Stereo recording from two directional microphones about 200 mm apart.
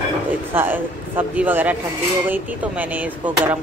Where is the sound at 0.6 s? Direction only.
10° right (ahead or behind).